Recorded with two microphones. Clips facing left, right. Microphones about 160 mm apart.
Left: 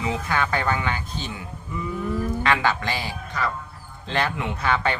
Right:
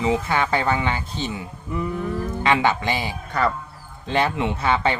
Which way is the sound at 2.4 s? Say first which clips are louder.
Right 5 dB; 20° right (ahead or behind).